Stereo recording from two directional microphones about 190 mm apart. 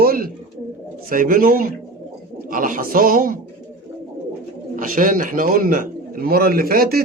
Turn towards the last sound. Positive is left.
turn(degrees=-50)  # may be behind; listen again after turning